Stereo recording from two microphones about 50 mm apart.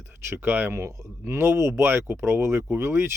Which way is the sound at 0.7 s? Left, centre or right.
Right.